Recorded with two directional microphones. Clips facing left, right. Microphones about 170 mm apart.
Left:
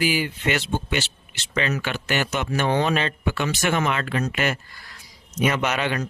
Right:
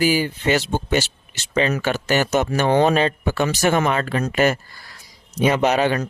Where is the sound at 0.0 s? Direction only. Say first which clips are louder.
Right 4 dB; 40° right (ahead or behind).